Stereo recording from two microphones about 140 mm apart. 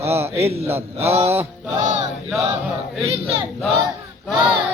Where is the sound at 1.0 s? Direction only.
50° right (ahead or behind).